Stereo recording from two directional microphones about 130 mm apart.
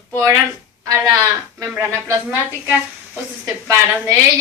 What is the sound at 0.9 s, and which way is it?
Speech, 25° right (ahead or behind).